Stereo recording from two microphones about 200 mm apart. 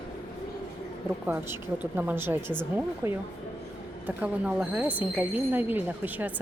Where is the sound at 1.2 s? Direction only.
10° right (ahead or behind).